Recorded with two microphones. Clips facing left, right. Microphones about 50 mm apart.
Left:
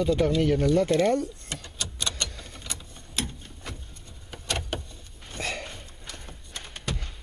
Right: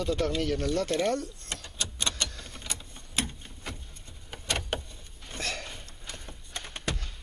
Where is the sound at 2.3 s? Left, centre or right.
Centre.